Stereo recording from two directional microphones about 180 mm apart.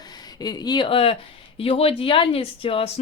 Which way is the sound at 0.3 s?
20° left (ahead or behind).